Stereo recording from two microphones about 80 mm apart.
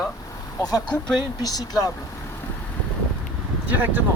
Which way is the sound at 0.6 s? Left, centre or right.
Left.